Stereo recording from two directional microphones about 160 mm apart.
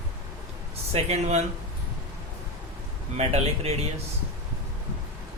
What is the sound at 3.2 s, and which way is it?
Speech, 40° right (ahead or behind).